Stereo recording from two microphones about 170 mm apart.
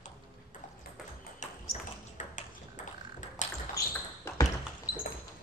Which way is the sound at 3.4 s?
45° left (ahead or behind).